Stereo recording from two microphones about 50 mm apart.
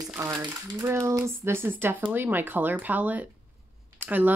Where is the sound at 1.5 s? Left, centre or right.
Right.